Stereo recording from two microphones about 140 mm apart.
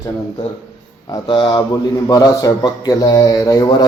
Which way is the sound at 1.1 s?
30° left (ahead or behind).